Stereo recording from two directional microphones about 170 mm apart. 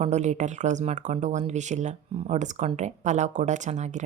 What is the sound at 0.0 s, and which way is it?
A woman's voice, 40° right (ahead or behind).